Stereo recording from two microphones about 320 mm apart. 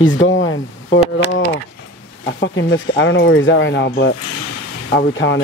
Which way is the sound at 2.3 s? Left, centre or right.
Left.